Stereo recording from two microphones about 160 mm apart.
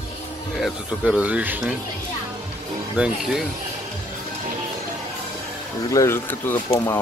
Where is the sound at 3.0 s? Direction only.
Centre (ahead or behind).